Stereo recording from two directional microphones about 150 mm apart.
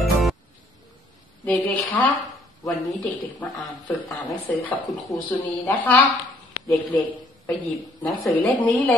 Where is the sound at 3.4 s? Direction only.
10° left (ahead or behind).